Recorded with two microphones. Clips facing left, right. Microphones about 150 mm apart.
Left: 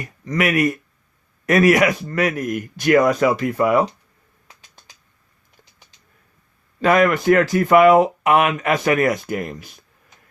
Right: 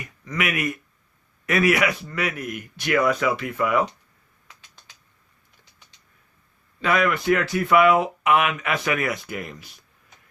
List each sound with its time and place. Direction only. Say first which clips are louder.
0.0 s speech: left 6 dB; 40° left (ahead or behind)
6.8 s speech: left 6 dB; 45° left (ahead or behind)